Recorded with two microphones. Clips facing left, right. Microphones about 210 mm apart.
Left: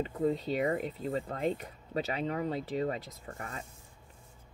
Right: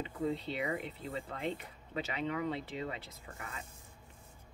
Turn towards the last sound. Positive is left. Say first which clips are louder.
# left 5 dB
turn(degrees=40)  # may be behind; listen again after turning